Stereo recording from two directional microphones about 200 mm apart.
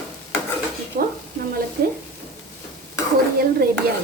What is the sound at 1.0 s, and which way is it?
Stir, 45° right (ahead or behind).